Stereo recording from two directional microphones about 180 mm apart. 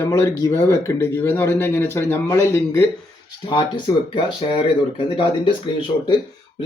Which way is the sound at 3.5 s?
30° left (ahead or behind).